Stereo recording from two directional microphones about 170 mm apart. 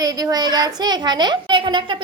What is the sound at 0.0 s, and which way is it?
A child's voice, 20° right (ahead or behind).